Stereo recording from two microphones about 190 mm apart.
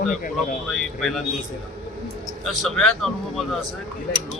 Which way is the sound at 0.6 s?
Centre (ahead or behind).